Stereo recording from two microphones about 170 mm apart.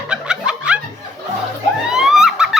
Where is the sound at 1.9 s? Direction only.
Centre (ahead or behind).